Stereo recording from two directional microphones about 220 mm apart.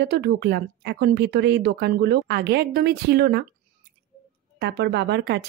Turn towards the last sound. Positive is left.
turn(degrees=-50)  # may be behind; listen again after turning